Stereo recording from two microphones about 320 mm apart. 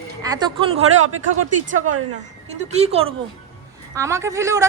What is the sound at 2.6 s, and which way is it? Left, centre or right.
A woman's voice, centre.